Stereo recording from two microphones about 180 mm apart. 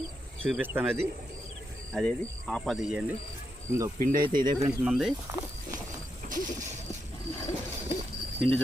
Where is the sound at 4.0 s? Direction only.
50° right (ahead or behind).